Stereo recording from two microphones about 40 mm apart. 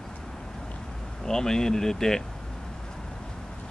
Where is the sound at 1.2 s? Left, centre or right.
Centre.